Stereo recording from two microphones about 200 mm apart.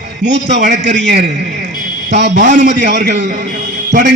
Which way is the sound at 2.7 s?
60° right (ahead or behind).